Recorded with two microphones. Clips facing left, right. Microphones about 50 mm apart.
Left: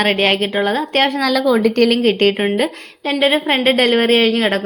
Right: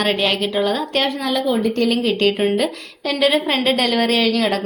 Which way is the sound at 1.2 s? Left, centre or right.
Left.